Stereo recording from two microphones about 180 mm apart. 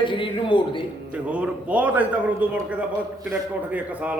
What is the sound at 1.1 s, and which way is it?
A man's voice, 5° right (ahead or behind).